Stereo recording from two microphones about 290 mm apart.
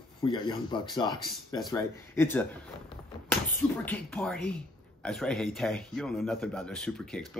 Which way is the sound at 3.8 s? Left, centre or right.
Centre.